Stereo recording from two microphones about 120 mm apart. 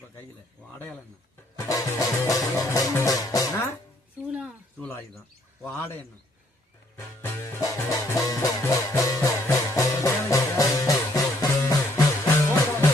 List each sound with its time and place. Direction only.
1.5 s music: 25° left (ahead or behind)
4.3 s a sound: 10° right (ahead or behind)
4.8 s bird: 15° left (ahead or behind)
6.9 s music: 20° left (ahead or behind)